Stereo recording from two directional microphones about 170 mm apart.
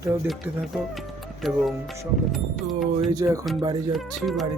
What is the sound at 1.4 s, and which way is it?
Speech, centre (ahead or behind).